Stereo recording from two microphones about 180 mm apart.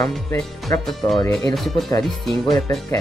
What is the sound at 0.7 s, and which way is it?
Speech, 15° left (ahead or behind).